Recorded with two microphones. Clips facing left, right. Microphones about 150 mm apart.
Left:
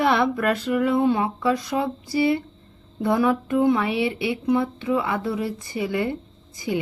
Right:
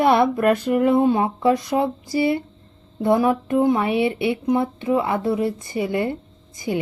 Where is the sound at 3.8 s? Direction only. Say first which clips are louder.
Right 3 dB; 50° right (ahead or behind).